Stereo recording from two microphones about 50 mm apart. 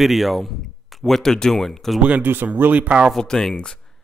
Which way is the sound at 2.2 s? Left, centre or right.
Right.